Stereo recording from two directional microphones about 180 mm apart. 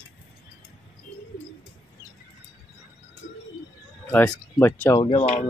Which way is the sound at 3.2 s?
85° left.